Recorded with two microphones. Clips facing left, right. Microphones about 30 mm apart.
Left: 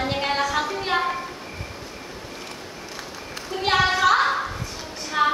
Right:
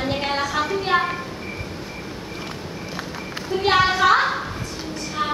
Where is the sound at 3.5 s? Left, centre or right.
Centre.